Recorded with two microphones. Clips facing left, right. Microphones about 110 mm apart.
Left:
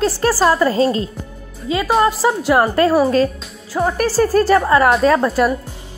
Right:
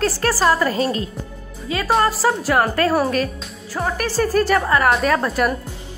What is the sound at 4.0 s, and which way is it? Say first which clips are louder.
A woman's voice: left 4 dB; 35° left (ahead or behind).